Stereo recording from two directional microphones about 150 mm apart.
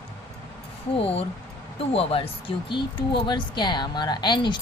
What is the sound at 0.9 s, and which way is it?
Speech, 40° left (ahead or behind).